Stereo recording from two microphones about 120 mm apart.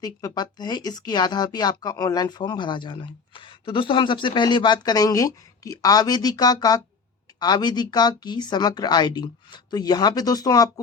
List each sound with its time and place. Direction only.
0.0 s speech: 30° left (ahead or behind)